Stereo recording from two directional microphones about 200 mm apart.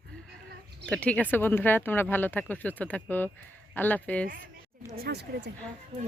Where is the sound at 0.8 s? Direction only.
5° left (ahead or behind).